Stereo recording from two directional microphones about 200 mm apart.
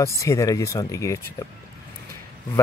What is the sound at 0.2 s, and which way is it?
Speech, 15° left (ahead or behind).